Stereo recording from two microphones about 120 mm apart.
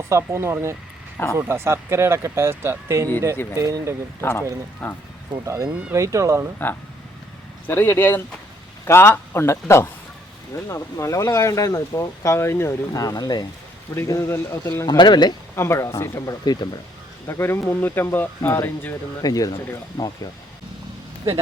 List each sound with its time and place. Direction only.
0.1 s speech: 20° right (ahead or behind)
4.2 s speech: 20° left (ahead or behind)
5.3 s speech: 35° right (ahead or behind)
7.7 s speech: 15° left (ahead or behind); by 13.4 s 35° left (ahead or behind)
13.9 s speech: 20° left (ahead or behind)
15.5 s speech: 20° left (ahead or behind)
17.2 s speech: 20° left (ahead or behind)
19.2 s speech: 30° left (ahead or behind)